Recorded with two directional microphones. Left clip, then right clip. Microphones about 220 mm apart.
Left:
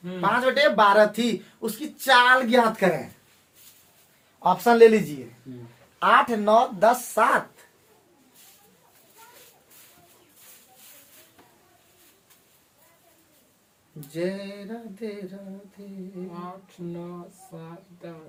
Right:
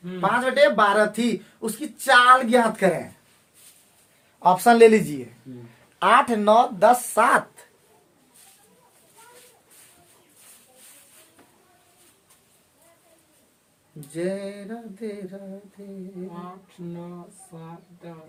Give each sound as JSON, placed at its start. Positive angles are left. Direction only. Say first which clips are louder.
{"t": 0.2, "sound": "speech", "louder": "right 2 dB", "side_deg": -5}
{"t": 4.4, "sound": "speech", "louder": "right 2 dB", "side_deg": -50}
{"t": 14.1, "sound": "a sound", "louder": "right 2 dB", "side_deg": -5}